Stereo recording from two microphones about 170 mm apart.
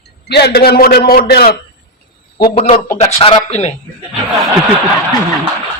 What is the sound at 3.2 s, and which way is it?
Speech, 30° left (ahead or behind).